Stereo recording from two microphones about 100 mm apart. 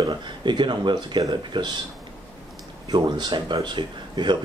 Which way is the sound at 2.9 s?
45° right (ahead or behind).